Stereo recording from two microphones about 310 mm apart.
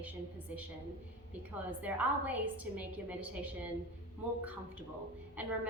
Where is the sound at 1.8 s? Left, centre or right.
Centre.